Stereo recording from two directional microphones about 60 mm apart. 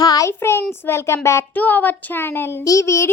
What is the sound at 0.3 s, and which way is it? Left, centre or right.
Child singing, left.